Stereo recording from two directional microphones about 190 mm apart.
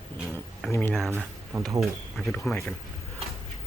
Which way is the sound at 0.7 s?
10° left (ahead or behind).